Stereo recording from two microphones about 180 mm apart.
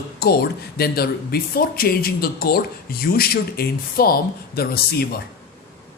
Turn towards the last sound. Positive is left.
turn(degrees=60)  # may be behind; listen again after turning